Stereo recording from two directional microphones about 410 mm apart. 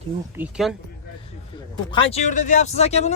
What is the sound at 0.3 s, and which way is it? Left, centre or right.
Speech, centre.